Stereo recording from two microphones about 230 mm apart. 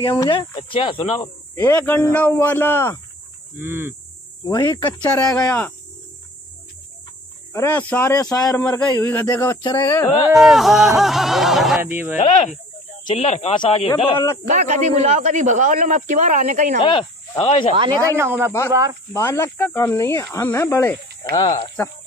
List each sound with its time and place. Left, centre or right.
0.0 s speech: left
3.5 s speech: centre
4.5 s speech: centre
7.5 s speech: centre
10.1 s speech: centre
13.0 s speech: left
14.5 s speech: right
16.8 s speech: left
18.1 s speech: centre
19.1 s speech: centre